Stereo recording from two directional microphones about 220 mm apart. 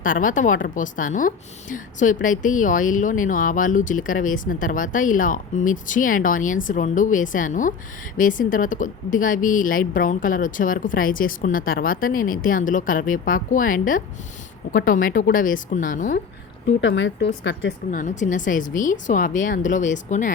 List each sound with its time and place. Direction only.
0.0 s a woman's voice: 35° left (ahead or behind)
16.8 s a woman's voice: 55° left (ahead or behind)
17.9 s a woman's voice: 35° left (ahead or behind)